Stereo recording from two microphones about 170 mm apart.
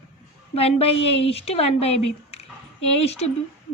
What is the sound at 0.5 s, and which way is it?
A woman's voice, 35° left (ahead or behind).